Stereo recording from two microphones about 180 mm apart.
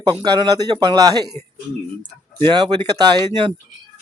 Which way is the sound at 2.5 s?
25° right (ahead or behind).